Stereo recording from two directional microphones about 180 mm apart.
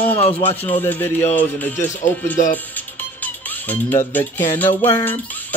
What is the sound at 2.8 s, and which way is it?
Music, 10° left (ahead or behind).